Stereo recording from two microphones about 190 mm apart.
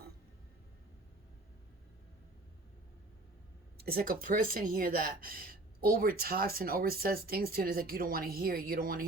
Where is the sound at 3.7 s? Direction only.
55° right (ahead or behind).